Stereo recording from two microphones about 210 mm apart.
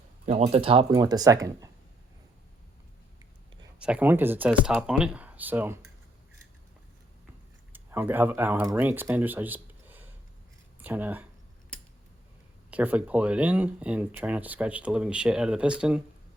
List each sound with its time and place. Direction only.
0.3 s speech: 30° right (ahead or behind); by 1.7 s 15° right (ahead or behind)
3.8 s speech: 5° right (ahead or behind)
7.7 s speech: 10° right (ahead or behind)
12.7 s speech: 5° right (ahead or behind)